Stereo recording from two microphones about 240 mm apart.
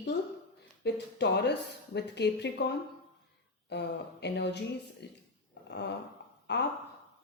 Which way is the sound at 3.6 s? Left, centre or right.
Left.